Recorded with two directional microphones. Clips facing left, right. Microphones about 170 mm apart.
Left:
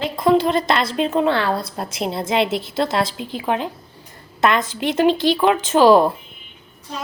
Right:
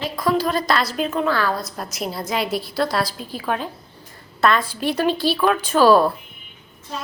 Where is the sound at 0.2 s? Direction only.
25° left (ahead or behind).